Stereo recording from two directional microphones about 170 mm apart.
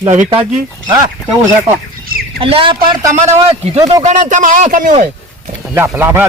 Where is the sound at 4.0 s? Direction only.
45° right (ahead or behind).